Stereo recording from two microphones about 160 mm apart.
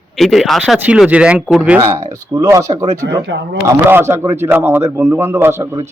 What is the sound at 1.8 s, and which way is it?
A man's voice, 30° right (ahead or behind).